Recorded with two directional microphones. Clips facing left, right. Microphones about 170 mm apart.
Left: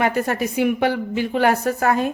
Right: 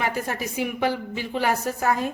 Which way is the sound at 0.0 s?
65° left (ahead or behind).